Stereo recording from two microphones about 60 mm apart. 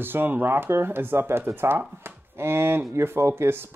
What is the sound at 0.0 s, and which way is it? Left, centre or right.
Speech, right.